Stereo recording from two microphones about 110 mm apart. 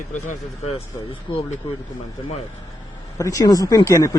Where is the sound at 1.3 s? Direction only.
50° left (ahead or behind).